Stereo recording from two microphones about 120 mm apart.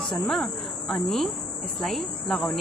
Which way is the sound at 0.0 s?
Centre (ahead or behind).